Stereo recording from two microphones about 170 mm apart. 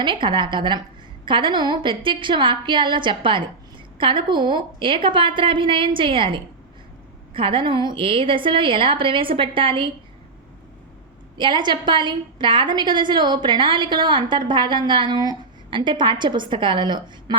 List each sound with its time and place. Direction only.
0.0 s a woman's voice: 30° right (ahead or behind)
11.3 s a woman's voice: 25° right (ahead or behind)